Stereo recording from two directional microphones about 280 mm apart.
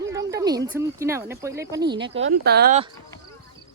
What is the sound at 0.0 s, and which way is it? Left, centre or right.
Speech, centre.